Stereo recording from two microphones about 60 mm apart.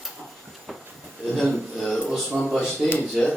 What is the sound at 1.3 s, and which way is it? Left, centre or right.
A man's voice, centre.